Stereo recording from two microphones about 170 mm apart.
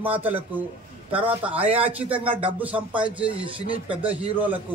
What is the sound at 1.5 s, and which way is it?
Speech, 35° right (ahead or behind).